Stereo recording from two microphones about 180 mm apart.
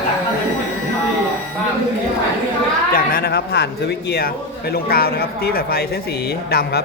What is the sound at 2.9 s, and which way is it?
A man's voice, 60° left (ahead or behind).